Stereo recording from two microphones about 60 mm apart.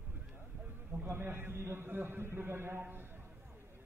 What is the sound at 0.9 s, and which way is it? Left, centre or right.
A man's voice, right.